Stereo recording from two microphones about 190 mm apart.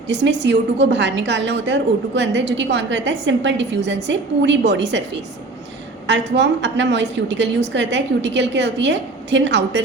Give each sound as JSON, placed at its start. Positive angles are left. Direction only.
{"t": 0.1, "sound": "a woman's voice", "side_deg": -65}
{"t": 6.1, "sound": "a woman's voice", "side_deg": -65}